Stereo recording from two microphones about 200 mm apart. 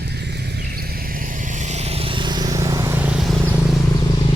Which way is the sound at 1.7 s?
30° right (ahead or behind).